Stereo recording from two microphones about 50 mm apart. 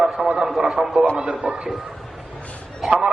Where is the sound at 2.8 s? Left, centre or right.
Centre.